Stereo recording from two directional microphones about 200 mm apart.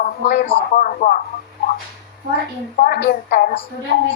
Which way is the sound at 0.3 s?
50° left (ahead or behind).